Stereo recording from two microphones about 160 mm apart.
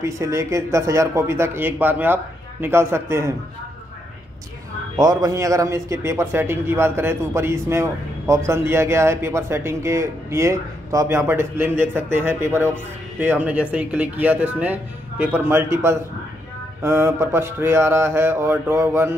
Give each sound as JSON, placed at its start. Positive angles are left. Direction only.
{"t": 0.0, "sound": "speech", "side_deg": -15}
{"t": 4.9, "sound": "speech", "side_deg": -20}